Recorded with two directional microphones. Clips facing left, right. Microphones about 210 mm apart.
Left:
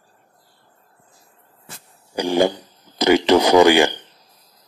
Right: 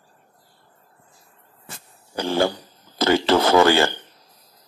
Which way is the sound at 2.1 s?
15° left (ahead or behind).